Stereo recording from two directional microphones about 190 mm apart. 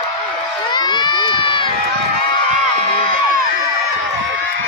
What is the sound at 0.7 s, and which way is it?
Run, 25° left (ahead or behind).